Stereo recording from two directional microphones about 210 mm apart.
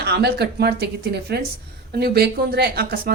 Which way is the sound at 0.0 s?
50° right (ahead or behind).